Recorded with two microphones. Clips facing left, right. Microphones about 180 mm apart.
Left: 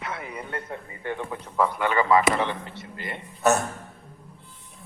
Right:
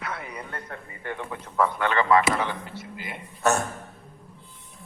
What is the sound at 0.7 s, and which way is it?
A man's voice, 15° left (ahead or behind).